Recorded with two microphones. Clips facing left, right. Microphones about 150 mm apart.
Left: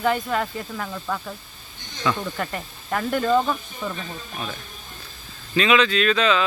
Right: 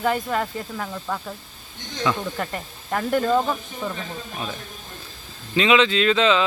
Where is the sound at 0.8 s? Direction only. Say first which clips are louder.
Left 1 dB; 15° right (ahead or behind).